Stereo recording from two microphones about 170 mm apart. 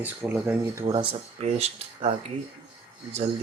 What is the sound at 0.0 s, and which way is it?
Speech, 10° right (ahead or behind).